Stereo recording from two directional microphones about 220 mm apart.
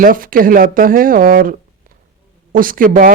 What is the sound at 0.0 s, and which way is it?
Speech, 40° right (ahead or behind).